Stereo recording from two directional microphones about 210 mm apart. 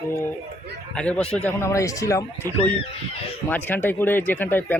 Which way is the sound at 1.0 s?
5° left (ahead or behind).